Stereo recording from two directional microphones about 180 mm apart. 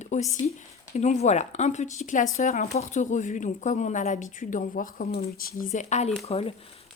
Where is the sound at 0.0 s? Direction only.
40° left (ahead or behind).